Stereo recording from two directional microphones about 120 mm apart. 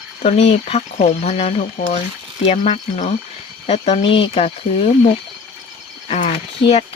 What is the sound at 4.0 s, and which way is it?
Speech, 45° left (ahead or behind).